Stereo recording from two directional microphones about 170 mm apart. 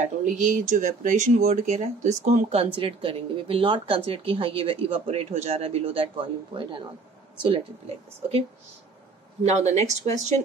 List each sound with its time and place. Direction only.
0.0 s speech: 50° right (ahead or behind)